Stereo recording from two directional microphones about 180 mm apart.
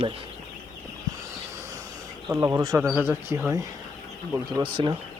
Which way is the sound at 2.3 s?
20° right (ahead or behind).